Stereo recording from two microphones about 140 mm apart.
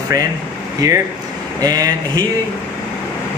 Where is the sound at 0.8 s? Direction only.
25° right (ahead or behind).